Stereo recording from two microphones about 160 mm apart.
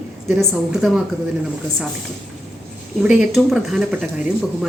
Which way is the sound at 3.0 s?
5° right (ahead or behind).